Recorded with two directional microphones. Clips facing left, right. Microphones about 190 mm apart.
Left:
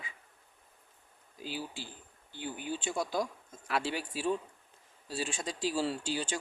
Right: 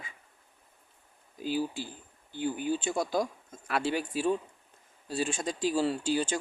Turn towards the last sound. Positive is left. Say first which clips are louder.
# right 6 dB
turn(degrees=-45)  # may be behind; listen again after turning